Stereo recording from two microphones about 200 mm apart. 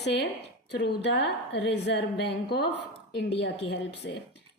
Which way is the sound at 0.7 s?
60° left (ahead or behind).